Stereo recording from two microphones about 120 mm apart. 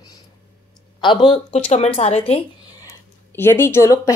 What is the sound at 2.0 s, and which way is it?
Speech, 65° left (ahead or behind).